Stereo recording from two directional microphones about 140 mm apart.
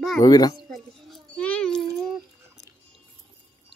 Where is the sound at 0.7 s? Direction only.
Centre (ahead or behind).